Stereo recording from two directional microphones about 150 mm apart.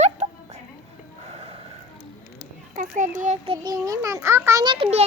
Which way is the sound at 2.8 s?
65° right (ahead or behind).